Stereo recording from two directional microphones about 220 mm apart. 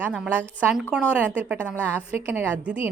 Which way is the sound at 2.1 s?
10° right (ahead or behind).